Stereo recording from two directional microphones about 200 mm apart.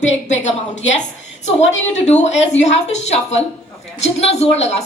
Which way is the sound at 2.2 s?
35° left (ahead or behind).